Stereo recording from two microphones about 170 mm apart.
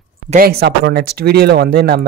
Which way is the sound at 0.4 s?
65° right (ahead or behind).